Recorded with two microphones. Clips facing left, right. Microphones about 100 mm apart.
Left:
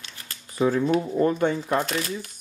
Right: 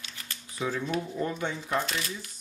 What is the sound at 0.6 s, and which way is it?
Speech, 45° left (ahead or behind).